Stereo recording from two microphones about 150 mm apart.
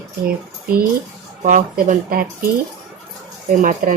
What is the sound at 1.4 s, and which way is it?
Speech, 60° right (ahead or behind).